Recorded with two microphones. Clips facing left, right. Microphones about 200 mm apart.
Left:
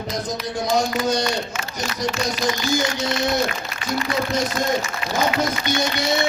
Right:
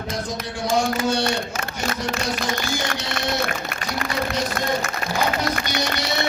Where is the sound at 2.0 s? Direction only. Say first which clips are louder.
Left 6 dB; 55° right (ahead or behind).